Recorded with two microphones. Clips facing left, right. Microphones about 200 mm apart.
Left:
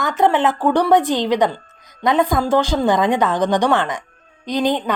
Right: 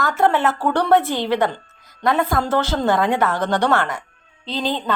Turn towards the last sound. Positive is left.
turn(degrees=15)  # may be behind; listen again after turning